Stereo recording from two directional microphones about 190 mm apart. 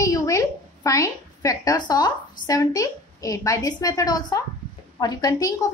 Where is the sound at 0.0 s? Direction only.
15° left (ahead or behind).